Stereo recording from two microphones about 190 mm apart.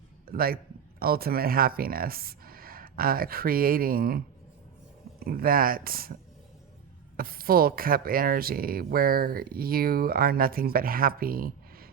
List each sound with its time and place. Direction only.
0.3 s speech: 50° right (ahead or behind)
5.2 s speech: 50° right (ahead or behind)
7.2 s speech: 50° right (ahead or behind)